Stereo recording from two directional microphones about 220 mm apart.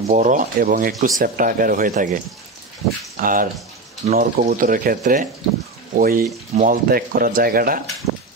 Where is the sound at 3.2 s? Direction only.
40° right (ahead or behind).